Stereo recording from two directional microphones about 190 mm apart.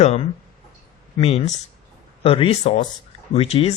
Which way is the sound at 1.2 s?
35° left (ahead or behind).